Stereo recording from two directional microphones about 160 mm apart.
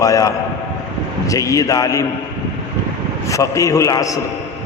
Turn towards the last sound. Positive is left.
turn(degrees=20)  # may be behind; listen again after turning